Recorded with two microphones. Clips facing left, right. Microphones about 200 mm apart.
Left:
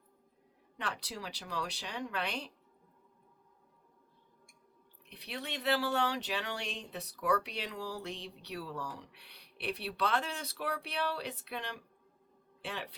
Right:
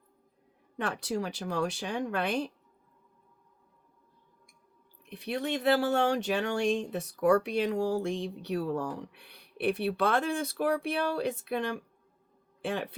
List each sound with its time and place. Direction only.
0.8 s speech: 50° right (ahead or behind)
5.0 s speech: 50° right (ahead or behind)